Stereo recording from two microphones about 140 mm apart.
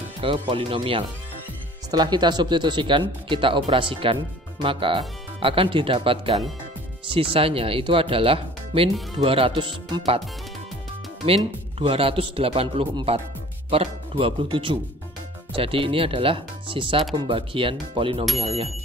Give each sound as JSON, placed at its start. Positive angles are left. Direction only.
{"t": 0.2, "sound": "speech", "side_deg": -40}
{"t": 11.2, "sound": "speech", "side_deg": -45}